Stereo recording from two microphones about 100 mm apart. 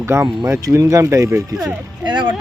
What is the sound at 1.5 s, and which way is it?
Speech, 45° right (ahead or behind).